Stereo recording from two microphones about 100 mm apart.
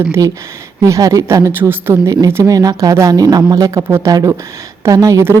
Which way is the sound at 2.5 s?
35° right (ahead or behind).